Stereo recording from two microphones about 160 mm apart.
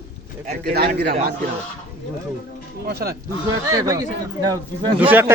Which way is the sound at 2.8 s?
75° right (ahead or behind).